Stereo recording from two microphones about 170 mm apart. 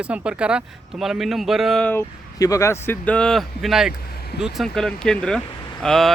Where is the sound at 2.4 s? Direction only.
20° left (ahead or behind); by 3.9 s centre (ahead or behind).